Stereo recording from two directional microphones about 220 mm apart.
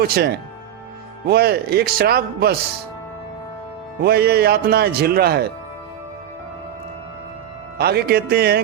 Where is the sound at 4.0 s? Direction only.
45° right (ahead or behind).